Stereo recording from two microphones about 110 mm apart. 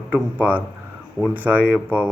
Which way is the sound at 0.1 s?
15° right (ahead or behind).